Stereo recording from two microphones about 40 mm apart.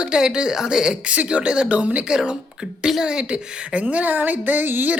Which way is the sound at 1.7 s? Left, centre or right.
Right.